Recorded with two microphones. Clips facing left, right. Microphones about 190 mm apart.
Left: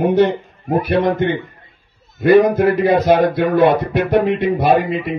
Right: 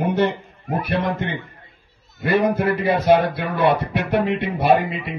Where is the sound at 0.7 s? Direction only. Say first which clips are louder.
Left 7 dB; 45° left (ahead or behind).